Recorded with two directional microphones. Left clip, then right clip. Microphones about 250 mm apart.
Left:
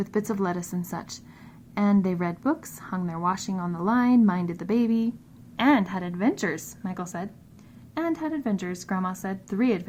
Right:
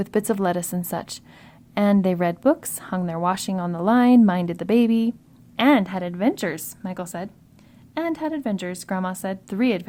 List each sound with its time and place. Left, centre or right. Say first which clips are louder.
0.0 s a woman's voice: right 5 dB; right